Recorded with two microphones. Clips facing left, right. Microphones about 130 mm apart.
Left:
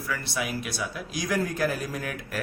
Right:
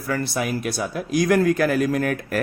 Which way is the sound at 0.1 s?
45° right (ahead or behind).